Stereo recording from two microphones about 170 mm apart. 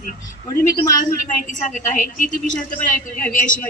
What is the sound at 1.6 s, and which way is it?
A woman's voice, 50° left (ahead or behind).